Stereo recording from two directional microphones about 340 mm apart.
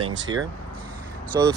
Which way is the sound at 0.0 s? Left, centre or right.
Centre.